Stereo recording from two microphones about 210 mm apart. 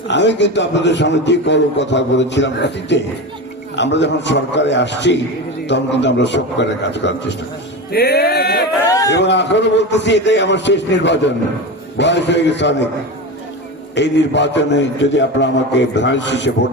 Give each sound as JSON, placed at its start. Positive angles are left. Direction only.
{"t": 0.1, "sound": "a man's voice", "side_deg": 55}
{"t": 13.9, "sound": "a man's voice", "side_deg": 55}